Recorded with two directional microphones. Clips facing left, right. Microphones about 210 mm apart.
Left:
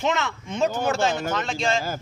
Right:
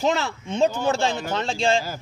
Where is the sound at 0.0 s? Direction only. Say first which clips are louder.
Right 2 dB; 35° right (ahead or behind).